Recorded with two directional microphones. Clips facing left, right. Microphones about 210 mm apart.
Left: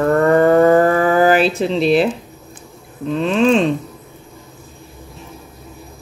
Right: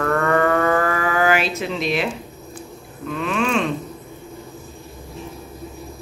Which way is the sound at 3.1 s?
30° left (ahead or behind).